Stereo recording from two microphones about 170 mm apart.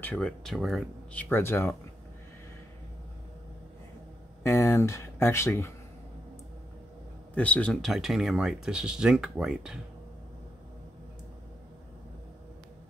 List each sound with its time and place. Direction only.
0.0 s speech: 5° left (ahead or behind)
1.3 s speech: 15° left (ahead or behind)
4.4 s speech: 15° left (ahead or behind)
7.3 s speech: 10° left (ahead or behind)